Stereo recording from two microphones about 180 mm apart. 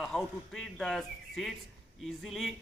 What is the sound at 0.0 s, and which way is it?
A man's voice, centre (ahead or behind).